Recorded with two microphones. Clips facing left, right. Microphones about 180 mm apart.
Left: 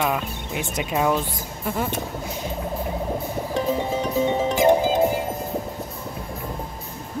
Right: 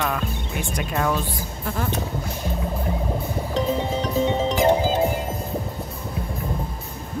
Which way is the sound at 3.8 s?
15° left (ahead or behind).